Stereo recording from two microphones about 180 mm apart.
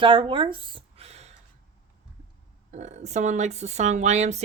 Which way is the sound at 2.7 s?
40° right (ahead or behind).